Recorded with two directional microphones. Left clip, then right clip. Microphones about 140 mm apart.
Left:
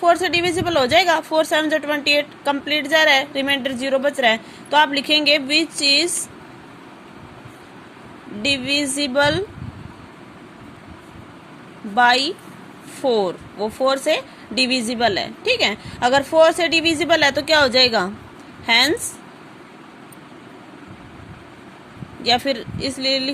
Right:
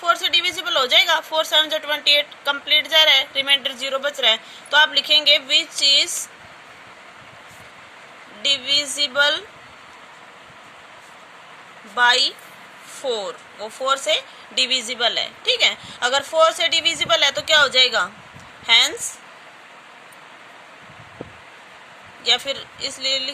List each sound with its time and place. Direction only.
0.0 s a woman's voice: 40° left (ahead or behind)
8.4 s a woman's voice: 40° left (ahead or behind)
11.9 s a woman's voice: 40° left (ahead or behind)
22.2 s speech: 45° left (ahead or behind)